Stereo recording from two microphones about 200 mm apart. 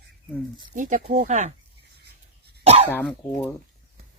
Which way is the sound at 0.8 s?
40° right (ahead or behind).